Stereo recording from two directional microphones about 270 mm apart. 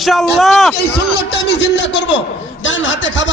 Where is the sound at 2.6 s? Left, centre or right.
Left.